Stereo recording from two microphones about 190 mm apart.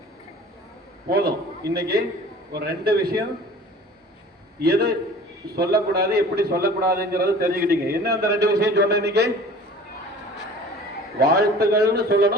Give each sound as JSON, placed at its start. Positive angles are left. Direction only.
{"t": 1.0, "sound": "a man's voice", "side_deg": -55}
{"t": 4.6, "sound": "a man's voice", "side_deg": -55}
{"t": 8.1, "sound": "a man's voice", "side_deg": -15}
{"t": 8.4, "sound": "a man's voice", "side_deg": -60}
{"t": 11.2, "sound": "a man's voice", "side_deg": -55}